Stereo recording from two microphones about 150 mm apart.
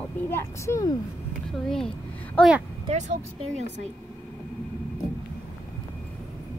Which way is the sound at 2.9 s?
50° right (ahead or behind).